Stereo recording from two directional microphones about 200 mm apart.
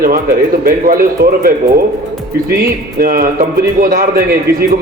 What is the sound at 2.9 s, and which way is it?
Speech, 45° right (ahead or behind).